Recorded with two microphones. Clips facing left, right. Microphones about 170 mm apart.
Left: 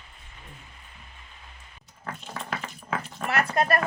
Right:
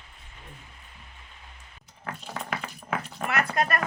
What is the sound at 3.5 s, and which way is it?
Speech, 35° left (ahead or behind).